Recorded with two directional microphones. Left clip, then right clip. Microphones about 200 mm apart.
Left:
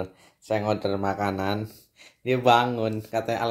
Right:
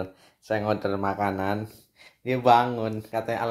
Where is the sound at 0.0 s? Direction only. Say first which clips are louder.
Left 1 dB; centre (ahead or behind).